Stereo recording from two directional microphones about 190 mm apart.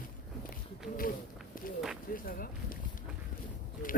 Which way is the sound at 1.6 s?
50° left (ahead or behind).